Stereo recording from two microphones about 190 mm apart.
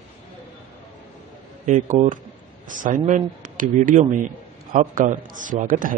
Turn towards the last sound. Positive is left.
turn(degrees=-45)  # may be behind; listen again after turning